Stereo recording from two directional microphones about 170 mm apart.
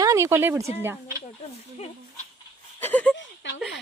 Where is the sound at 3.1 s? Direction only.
90° left.